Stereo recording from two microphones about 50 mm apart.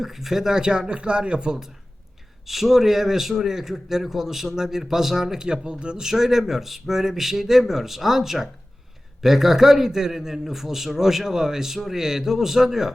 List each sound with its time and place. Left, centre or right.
0.0 s a man's voice: centre
2.5 s a man's voice: centre